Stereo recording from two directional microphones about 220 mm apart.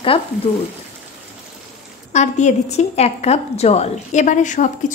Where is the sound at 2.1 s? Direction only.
30° left (ahead or behind).